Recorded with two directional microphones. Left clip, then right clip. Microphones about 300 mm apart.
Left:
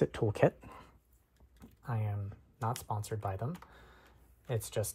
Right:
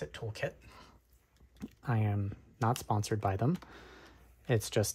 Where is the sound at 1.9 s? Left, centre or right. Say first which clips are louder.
Right 6 dB; right.